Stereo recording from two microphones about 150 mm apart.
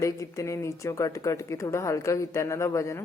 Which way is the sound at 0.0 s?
20° left (ahead or behind).